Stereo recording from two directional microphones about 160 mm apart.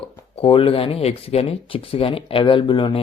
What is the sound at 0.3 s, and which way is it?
Speech, 35° left (ahead or behind).